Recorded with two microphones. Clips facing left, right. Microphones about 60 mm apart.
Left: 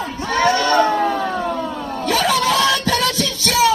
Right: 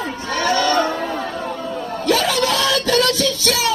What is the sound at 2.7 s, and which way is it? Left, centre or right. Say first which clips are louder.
Music: right 2 dB; centre.